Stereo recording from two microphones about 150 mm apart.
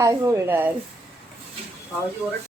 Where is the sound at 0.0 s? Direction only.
20° right (ahead or behind).